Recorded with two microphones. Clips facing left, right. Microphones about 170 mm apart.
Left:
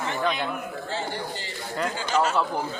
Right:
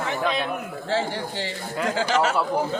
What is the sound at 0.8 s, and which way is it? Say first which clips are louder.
Speech: right 7 dB; 90° right.